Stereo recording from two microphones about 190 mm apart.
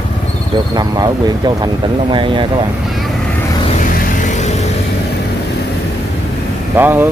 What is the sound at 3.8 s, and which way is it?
Vehicle, 45° left (ahead or behind).